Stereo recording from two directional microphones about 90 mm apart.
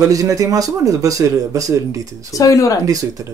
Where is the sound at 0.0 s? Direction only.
40° right (ahead or behind).